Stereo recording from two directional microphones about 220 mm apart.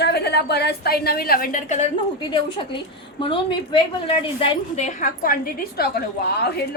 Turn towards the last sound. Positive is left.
turn(degrees=45)  # may be behind; listen again after turning